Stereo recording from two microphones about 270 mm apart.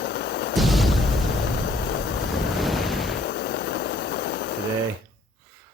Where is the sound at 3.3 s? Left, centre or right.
Left.